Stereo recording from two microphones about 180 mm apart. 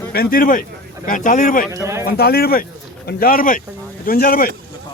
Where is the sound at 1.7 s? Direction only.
15° right (ahead or behind).